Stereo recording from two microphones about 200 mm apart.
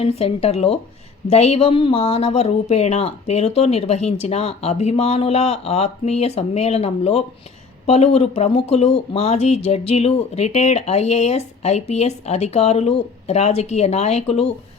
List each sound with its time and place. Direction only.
0.0 s speech: 30° left (ahead or behind)